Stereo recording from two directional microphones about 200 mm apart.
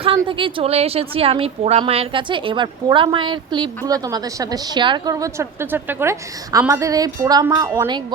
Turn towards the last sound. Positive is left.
turn(degrees=-20)  # may be behind; listen again after turning